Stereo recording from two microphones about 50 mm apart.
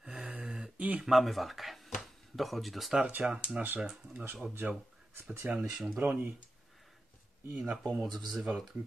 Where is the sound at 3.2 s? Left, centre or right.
Centre.